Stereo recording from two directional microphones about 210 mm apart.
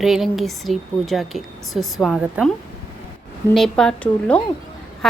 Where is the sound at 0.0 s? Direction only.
Centre (ahead or behind).